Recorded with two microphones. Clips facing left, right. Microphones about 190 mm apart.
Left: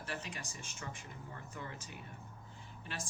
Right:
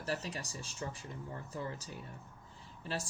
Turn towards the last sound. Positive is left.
turn(degrees=-35)  # may be behind; listen again after turning